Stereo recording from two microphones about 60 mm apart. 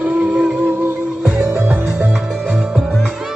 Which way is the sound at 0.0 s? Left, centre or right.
Right.